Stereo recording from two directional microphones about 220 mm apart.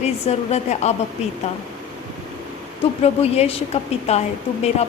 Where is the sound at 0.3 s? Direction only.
30° left (ahead or behind).